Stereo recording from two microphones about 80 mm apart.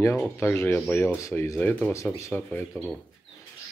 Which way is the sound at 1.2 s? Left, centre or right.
Left.